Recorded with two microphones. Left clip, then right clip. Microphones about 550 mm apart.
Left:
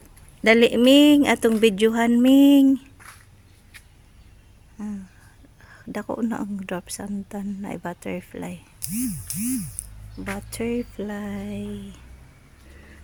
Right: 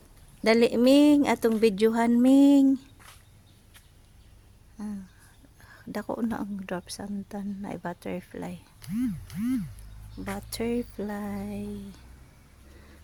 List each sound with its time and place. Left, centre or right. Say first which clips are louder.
0.4 s a woman's voice: left 5 dB; right
4.8 s a sound: left 4 dB; right
5.6 s a woman's voice: left 3 dB; right